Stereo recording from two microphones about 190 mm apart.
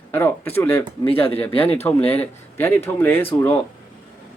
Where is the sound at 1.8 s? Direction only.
10° left (ahead or behind).